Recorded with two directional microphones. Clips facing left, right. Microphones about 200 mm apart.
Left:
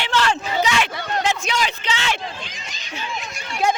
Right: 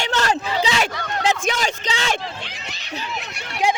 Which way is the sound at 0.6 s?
30° right (ahead or behind).